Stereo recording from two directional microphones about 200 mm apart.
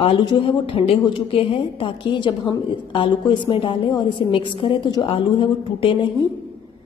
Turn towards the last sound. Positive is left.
turn(degrees=25)  # may be behind; listen again after turning